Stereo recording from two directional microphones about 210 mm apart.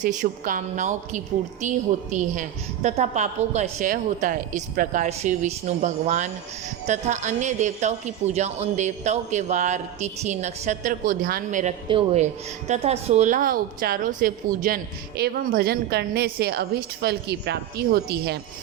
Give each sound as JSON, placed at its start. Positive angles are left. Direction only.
{"t": 0.0, "sound": "a woman's voice", "side_deg": -40}
{"t": 11.9, "sound": "speech", "side_deg": -30}